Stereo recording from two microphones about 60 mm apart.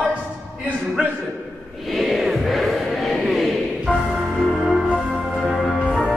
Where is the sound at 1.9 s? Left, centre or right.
Centre.